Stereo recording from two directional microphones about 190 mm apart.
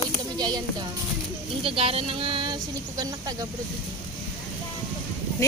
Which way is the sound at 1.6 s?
30° right (ahead or behind).